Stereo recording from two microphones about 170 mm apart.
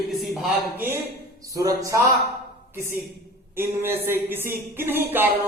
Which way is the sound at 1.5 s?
20° right (ahead or behind).